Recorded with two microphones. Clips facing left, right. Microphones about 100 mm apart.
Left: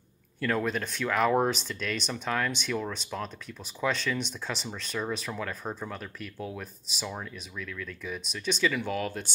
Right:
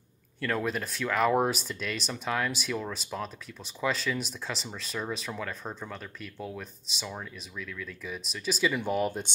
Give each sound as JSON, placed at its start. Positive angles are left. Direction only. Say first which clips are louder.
{"t": 0.4, "sound": "speech", "louder": "left 1 dB", "side_deg": 0}
{"t": 8.6, "sound": "speech", "louder": "right 2 dB", "side_deg": -20}